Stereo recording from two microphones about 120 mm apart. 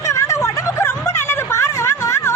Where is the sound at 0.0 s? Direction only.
25° left (ahead or behind).